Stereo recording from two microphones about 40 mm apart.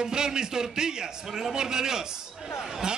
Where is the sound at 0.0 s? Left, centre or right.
Centre.